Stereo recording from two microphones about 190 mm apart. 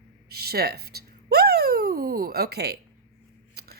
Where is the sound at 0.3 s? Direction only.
55° right (ahead or behind).